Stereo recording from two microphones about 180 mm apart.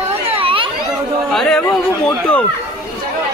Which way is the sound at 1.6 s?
10° left (ahead or behind).